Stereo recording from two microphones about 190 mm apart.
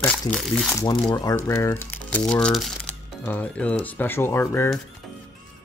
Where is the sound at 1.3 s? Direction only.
10° left (ahead or behind).